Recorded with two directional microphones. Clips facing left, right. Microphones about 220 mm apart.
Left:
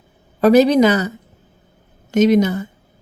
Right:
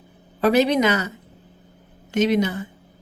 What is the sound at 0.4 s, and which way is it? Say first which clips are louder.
A woman's voice: left 6 dB; 40° left (ahead or behind).